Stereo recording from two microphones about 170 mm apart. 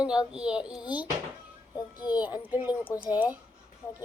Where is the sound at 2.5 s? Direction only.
10° right (ahead or behind).